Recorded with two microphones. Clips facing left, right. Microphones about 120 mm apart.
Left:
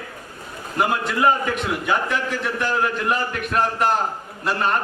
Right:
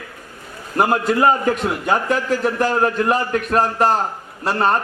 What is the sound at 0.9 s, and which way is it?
A man's voice, 40° right (ahead or behind).